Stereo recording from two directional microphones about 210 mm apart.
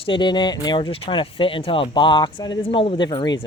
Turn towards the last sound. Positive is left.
turn(degrees=20)  # may be behind; listen again after turning